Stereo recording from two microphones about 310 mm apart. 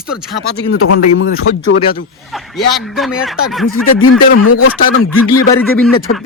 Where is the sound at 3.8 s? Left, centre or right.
Left.